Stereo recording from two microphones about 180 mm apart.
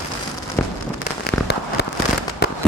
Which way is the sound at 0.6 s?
10° left (ahead or behind).